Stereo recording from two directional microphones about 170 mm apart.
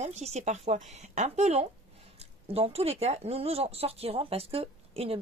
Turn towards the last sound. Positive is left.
turn(degrees=-35)  # may be behind; listen again after turning